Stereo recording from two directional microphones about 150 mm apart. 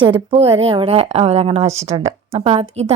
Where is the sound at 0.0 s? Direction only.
35° right (ahead or behind).